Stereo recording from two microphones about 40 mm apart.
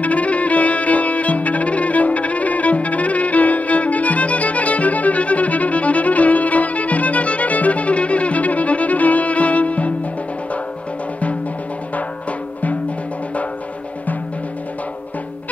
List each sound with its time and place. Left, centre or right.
0.0 s music: left
11.9 s music: left